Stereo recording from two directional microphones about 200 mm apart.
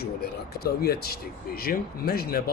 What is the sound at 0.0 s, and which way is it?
Speech, 50° left (ahead or behind).